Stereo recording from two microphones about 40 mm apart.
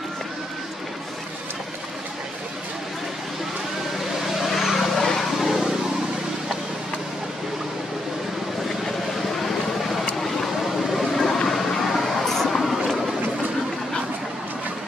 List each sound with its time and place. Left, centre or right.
4.3 s vehicle: centre
4.8 s vehicle: centre
5.4 s a sound: centre
10.2 s vehicle: centre